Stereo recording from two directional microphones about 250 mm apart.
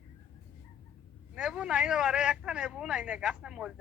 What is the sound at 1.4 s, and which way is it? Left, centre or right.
A man's voice, centre.